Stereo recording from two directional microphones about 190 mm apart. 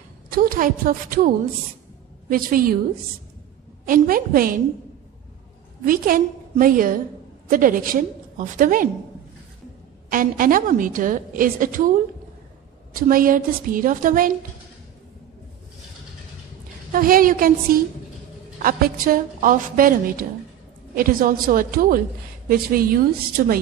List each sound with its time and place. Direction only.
0.3 s a woman's voice: 45° right (ahead or behind)
3.8 s a woman's voice: 50° right (ahead or behind)
5.9 s a woman's voice: 50° right (ahead or behind)
10.1 s a woman's voice: 45° right (ahead or behind)
12.9 s a woman's voice: 45° right (ahead or behind)
16.9 s a woman's voice: 50° right (ahead or behind)